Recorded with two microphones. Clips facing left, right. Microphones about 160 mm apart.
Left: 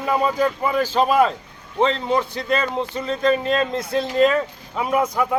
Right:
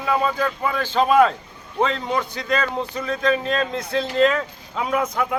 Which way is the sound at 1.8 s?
30° left (ahead or behind).